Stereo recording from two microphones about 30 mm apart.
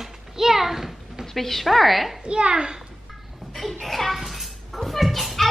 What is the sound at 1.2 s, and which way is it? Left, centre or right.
Speech, centre.